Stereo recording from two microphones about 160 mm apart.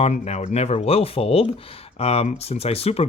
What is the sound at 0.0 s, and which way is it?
Speech, 45° left (ahead or behind).